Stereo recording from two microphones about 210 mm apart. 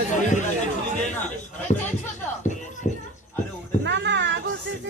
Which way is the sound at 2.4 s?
35° left (ahead or behind).